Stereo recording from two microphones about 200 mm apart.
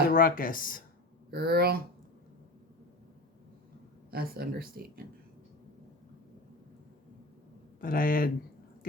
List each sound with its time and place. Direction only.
0.1 s speech: 45° left (ahead or behind)
1.3 s speech: 50° right (ahead or behind)
4.1 s speech: 50° right (ahead or behind)
7.8 s speech: 45° left (ahead or behind)